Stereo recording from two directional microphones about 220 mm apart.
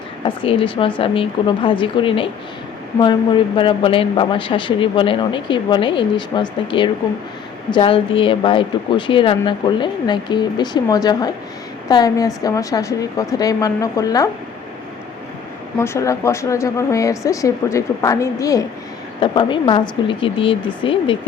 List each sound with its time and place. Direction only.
0.3 s speech: 25° left (ahead or behind)
15.8 s speech: 10° left (ahead or behind)